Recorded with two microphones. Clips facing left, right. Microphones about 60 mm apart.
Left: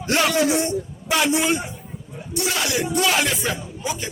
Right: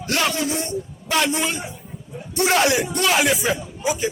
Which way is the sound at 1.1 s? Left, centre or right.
Centre.